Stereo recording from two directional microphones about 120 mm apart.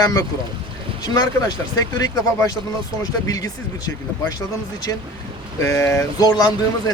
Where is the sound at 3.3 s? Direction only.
30° left (ahead or behind).